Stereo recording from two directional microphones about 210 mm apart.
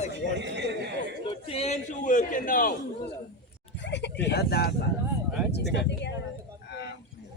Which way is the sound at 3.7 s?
55° left (ahead or behind).